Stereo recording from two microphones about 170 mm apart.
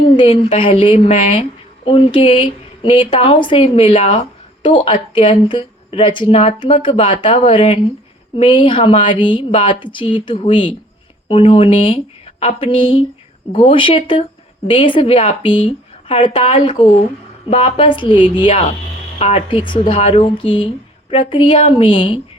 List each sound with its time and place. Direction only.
0.2 s a woman's voice: 30° left (ahead or behind)